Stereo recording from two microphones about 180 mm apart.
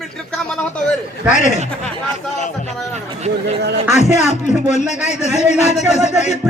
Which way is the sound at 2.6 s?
40° right (ahead or behind).